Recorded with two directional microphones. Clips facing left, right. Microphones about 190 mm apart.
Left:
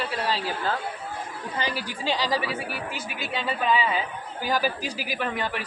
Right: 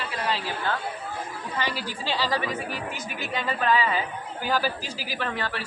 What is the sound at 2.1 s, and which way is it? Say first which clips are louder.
Speech: right 3 dB; 10° left (ahead or behind).